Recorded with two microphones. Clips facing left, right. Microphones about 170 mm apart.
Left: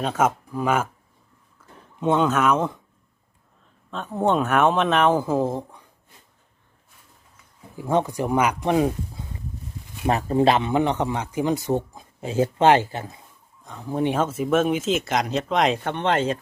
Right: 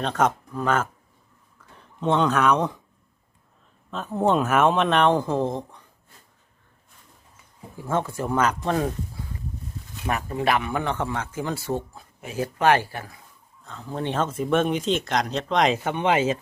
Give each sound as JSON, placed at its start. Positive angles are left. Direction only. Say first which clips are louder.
{"t": 0.0, "sound": "speech", "louder": "left 1 dB", "side_deg": 5}
{"t": 2.0, "sound": "speech", "louder": "left 1 dB", "side_deg": 5}
{"t": 3.9, "sound": "speech", "louder": "even", "side_deg": 0}
{"t": 7.8, "sound": "speech", "louder": "left 4 dB", "side_deg": 15}
{"t": 10.1, "sound": "speech", "louder": "left 5 dB", "side_deg": 30}